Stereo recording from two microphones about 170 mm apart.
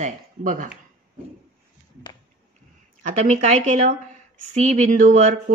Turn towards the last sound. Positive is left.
turn(degrees=-45)  # may be behind; listen again after turning